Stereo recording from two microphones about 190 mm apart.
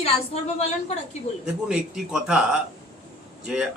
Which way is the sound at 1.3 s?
35° left (ahead or behind).